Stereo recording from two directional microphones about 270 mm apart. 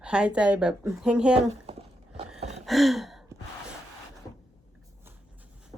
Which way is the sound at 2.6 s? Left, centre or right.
Centre.